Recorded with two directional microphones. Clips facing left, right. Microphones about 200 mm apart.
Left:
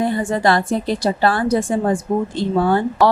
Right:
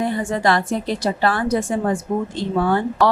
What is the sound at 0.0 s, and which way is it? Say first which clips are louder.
Speech: left 2 dB; 30° left (ahead or behind).